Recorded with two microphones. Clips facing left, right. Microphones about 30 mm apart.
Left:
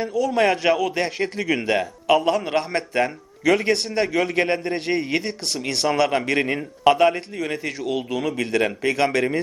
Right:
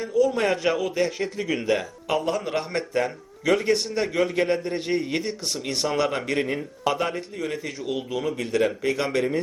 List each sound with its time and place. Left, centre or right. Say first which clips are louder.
0.1 s a man's voice: even; left
9.0 s speech: left 3 dB; left